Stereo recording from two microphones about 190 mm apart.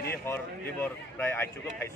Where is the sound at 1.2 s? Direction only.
10° left (ahead or behind).